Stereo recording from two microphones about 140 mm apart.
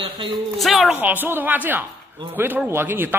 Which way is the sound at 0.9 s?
15° right (ahead or behind).